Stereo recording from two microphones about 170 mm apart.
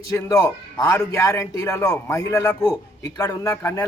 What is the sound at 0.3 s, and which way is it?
A man's voice, 15° left (ahead or behind).